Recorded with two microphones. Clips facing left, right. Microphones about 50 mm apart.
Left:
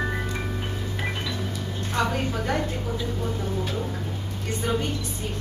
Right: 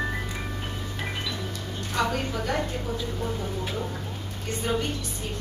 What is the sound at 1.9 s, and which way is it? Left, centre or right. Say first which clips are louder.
Speech: left 1 dB; centre.